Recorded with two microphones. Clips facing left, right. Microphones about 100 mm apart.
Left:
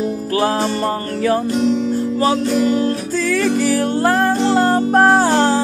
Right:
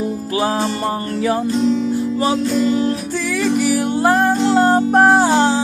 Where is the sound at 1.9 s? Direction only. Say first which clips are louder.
Left 1 dB; 25° right (ahead or behind).